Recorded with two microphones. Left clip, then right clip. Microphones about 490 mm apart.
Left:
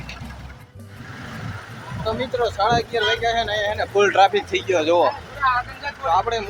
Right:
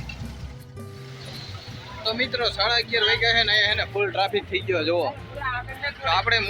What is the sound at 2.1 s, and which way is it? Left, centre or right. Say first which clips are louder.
Speech: left 2 dB; right.